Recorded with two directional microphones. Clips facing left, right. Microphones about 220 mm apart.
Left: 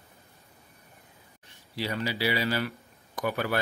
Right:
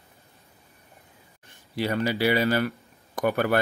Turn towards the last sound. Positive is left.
turn(degrees=-55)  # may be behind; listen again after turning